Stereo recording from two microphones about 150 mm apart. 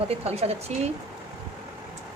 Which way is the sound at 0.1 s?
45° right (ahead or behind).